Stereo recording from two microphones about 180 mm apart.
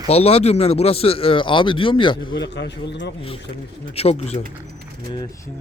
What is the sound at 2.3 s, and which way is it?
Speech, 75° left (ahead or behind).